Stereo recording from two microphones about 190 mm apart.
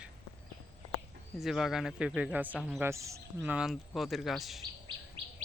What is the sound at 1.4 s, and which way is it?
Speech, centre (ahead or behind).